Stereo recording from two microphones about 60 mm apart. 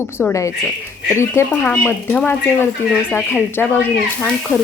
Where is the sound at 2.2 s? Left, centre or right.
Left.